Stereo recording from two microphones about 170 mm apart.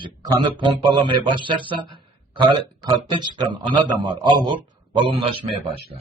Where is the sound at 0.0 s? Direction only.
25° right (ahead or behind).